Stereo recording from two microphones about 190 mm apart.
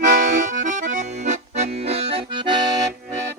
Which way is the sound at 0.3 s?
45° right (ahead or behind).